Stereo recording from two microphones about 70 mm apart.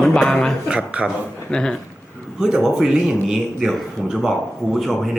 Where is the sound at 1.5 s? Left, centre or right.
Centre.